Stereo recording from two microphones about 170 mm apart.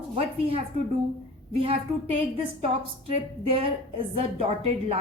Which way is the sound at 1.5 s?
35° right (ahead or behind).